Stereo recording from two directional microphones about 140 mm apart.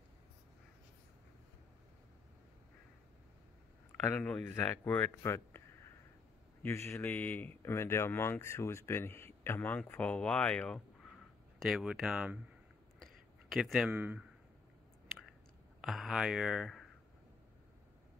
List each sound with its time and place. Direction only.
4.1 s speech: 10° left (ahead or behind)
6.6 s speech: 20° left (ahead or behind)
11.6 s speech: 5° right (ahead or behind)
13.0 s a sound: centre (ahead or behind)
15.8 s speech: centre (ahead or behind)